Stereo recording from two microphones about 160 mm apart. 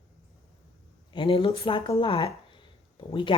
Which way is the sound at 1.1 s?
30° left (ahead or behind).